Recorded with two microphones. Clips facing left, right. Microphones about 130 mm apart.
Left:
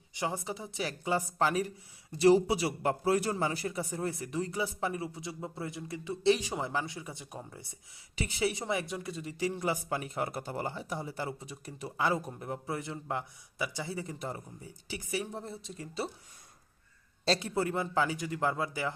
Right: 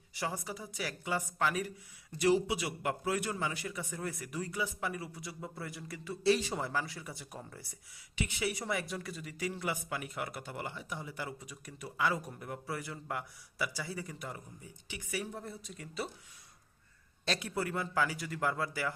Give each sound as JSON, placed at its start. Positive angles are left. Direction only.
{"t": 0.1, "sound": "a woman's voice", "side_deg": 20}
{"t": 8.1, "sound": "a woman's voice", "side_deg": 30}
{"t": 17.2, "sound": "a woman's voice", "side_deg": 30}